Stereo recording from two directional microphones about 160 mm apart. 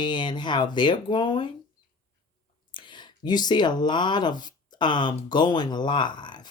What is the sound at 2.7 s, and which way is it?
Speech, 30° left (ahead or behind).